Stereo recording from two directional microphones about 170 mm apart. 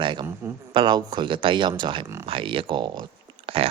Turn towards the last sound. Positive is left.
turn(degrees=-35)  # may be behind; listen again after turning